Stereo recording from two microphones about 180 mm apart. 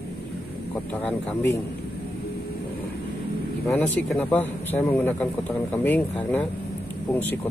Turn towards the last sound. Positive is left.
turn(degrees=10)  # may be behind; listen again after turning